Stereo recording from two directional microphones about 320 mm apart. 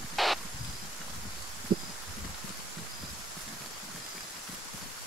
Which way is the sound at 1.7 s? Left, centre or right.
Right.